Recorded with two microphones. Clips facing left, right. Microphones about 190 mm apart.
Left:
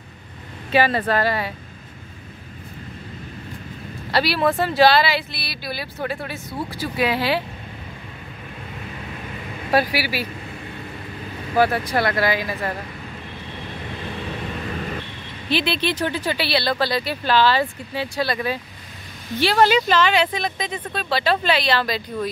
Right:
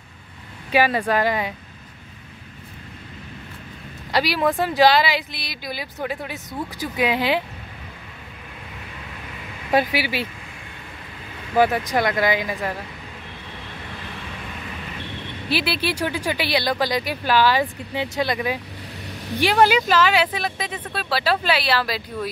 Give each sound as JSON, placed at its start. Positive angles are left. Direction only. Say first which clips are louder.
{"t": 0.7, "sound": "speech", "louder": "even", "side_deg": -10}
{"t": 4.1, "sound": "speech", "louder": "left 1 dB", "side_deg": -15}
{"t": 9.7, "sound": "speech", "louder": "even", "side_deg": -20}
{"t": 11.5, "sound": "speech", "louder": "even", "side_deg": -15}
{"t": 15.5, "sound": "speech", "louder": "left 2 dB", "side_deg": -10}